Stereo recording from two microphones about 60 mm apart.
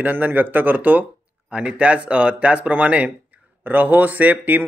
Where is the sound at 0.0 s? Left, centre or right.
Right.